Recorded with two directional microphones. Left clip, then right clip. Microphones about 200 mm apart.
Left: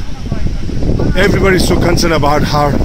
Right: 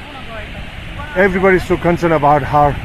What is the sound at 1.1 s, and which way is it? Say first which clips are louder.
Speech: even; 15° left (ahead or behind).